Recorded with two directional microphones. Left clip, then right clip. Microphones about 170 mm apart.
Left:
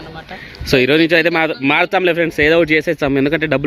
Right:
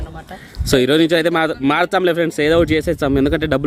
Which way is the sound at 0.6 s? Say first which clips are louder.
Left 1 dB; 25° right (ahead or behind).